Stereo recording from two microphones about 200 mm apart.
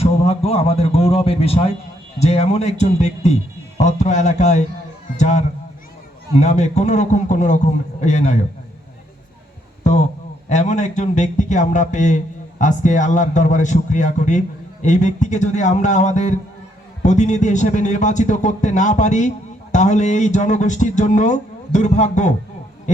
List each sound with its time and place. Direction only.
0.0 s a man's voice: 30° left (ahead or behind)
9.8 s a man's voice: 35° left (ahead or behind)